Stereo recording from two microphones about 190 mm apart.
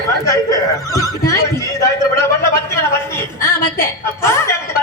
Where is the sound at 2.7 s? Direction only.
15° left (ahead or behind).